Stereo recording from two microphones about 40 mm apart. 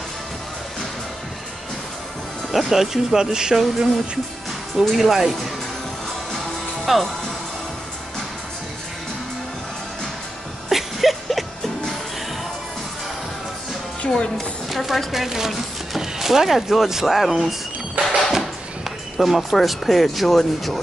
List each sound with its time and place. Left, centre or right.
2.5 s speech: centre
4.7 s speech: centre
6.9 s speech: centre
10.7 s music: centre
14.0 s speech: left
14.7 s speech: centre
18.0 s music: right
18.3 s speech: centre